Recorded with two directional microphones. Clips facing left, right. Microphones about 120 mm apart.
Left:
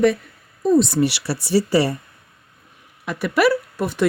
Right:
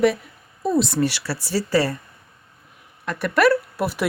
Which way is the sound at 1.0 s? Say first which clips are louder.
Left 2 dB; 15° left (ahead or behind).